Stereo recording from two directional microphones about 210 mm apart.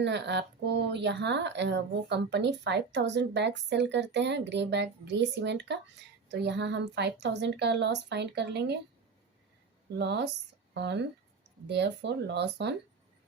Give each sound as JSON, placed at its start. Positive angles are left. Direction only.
{"t": 0.0, "sound": "speech", "side_deg": -55}
{"t": 10.0, "sound": "speech", "side_deg": -55}